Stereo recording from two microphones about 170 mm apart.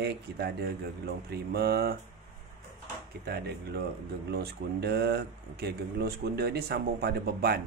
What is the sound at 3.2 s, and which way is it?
Speech, 70° right (ahead or behind).